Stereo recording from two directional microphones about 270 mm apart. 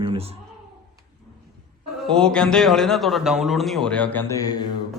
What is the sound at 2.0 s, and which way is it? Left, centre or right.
A man's voice, centre.